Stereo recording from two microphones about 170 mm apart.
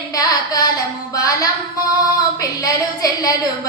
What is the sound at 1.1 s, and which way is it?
Singing, 20° left (ahead or behind).